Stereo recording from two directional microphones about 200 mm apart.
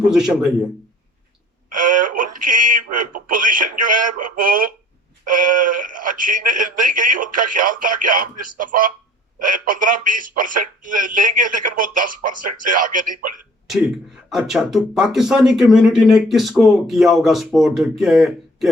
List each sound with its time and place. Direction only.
0.1 s speech: 5° right (ahead or behind)
1.7 s speech: 40° right (ahead or behind)
14.3 s speech: centre (ahead or behind)